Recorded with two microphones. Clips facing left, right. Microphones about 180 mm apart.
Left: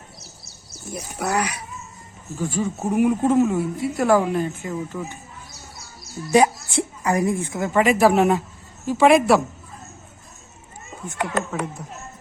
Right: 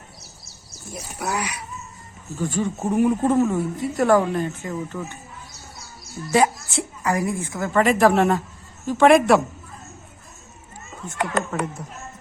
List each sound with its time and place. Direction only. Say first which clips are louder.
0.9 s speech: left 3 dB; 60° left (ahead or behind)
2.3 s a woman's voice: even; 10° left (ahead or behind)
6.3 s a woman's voice: left 2 dB; 20° left (ahead or behind); by 9.4 s centre (ahead or behind)
11.5 s a woman's voice: right 1 dB; 5° left (ahead or behind)